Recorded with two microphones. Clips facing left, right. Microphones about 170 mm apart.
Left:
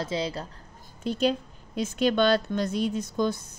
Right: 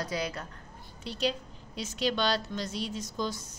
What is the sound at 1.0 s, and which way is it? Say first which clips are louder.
A woman's voice: left 7 dB; 50° left (ahead or behind).